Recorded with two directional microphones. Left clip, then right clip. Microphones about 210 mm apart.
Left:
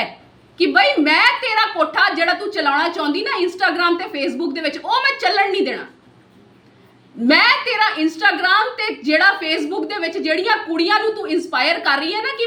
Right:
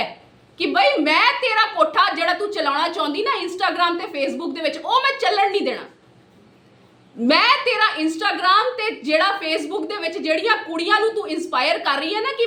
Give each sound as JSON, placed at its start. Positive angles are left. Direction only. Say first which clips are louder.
{"t": 0.5, "sound": "a woman's voice", "louder": "left 3 dB", "side_deg": -5}
{"t": 7.3, "sound": "a woman's voice", "louder": "left 2 dB", "side_deg": -5}